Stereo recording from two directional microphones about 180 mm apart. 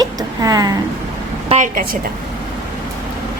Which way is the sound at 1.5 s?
45° right (ahead or behind).